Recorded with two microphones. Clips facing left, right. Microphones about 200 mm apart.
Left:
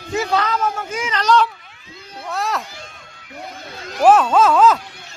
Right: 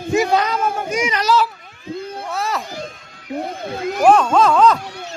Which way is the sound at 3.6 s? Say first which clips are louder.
Right 11 dB; 55° right (ahead or behind).